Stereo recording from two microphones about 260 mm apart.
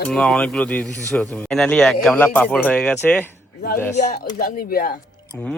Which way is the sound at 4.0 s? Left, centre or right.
Left.